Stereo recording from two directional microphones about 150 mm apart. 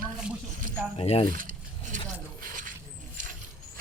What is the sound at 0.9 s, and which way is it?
Speech, 40° left (ahead or behind).